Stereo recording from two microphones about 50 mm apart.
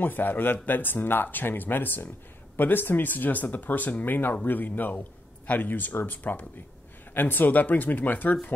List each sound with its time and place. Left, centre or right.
0.0 s speech: left